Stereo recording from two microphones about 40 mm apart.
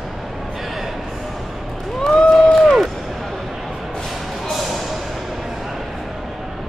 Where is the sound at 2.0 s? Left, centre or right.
Centre.